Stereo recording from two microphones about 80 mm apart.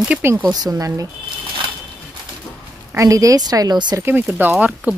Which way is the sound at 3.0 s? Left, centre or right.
Right.